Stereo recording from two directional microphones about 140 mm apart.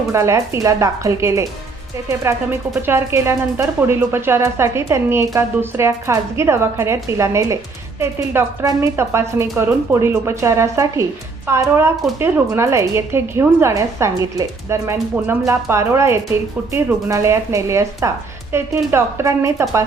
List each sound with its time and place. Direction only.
0.1 s speech: 20° right (ahead or behind)